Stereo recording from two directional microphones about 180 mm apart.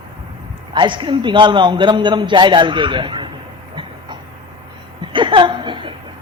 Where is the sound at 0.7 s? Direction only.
25° right (ahead or behind).